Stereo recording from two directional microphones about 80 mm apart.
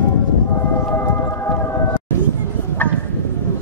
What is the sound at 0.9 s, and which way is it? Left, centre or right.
Music, left.